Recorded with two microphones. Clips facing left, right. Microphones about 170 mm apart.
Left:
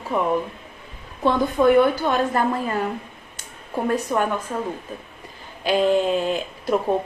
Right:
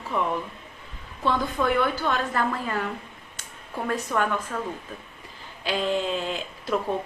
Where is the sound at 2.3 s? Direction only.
25° left (ahead or behind).